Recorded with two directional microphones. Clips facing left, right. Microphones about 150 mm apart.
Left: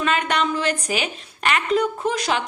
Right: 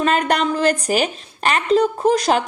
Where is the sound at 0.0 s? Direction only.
40° right (ahead or behind).